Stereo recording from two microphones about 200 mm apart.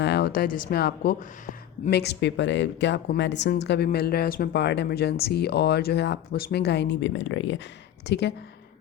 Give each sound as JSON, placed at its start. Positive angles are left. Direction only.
{"t": 0.0, "sound": "speech", "side_deg": 55}
{"t": 8.0, "sound": "speech", "side_deg": 55}